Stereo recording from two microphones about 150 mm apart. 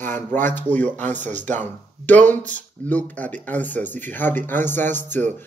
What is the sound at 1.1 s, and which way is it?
Speech, 55° right (ahead or behind).